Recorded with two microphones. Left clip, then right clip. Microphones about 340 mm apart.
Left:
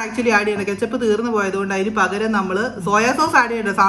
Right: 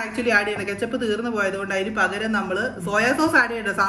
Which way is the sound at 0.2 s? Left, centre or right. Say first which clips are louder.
Left 3 dB; left.